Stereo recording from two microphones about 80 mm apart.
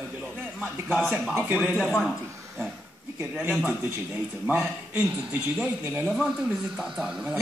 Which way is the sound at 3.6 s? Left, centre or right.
Centre.